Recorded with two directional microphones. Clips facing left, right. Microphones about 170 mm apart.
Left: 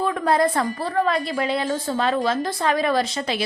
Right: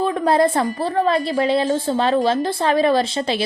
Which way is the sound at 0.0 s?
30° right (ahead or behind).